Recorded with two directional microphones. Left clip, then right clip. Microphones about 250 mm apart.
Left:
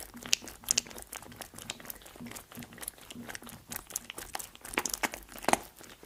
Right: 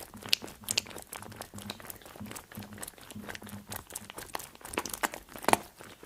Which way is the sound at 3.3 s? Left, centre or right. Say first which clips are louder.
Right 2 dB; centre.